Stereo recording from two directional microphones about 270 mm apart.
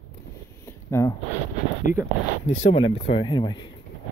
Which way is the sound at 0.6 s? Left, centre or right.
Centre.